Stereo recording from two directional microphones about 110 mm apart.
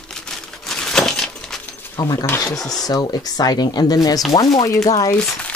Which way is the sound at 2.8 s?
35° left (ahead or behind).